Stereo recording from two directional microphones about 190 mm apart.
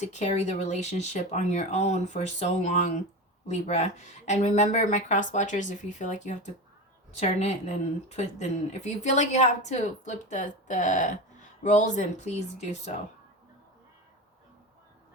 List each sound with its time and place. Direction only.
0.0 s speech: 35° left (ahead or behind)